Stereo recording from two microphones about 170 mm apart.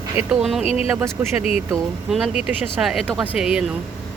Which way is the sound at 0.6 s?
35° left (ahead or behind).